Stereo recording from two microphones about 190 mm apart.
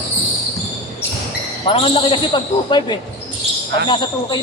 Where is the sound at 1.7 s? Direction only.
30° left (ahead or behind).